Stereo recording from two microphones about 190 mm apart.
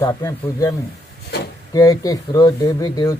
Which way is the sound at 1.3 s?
60° left (ahead or behind).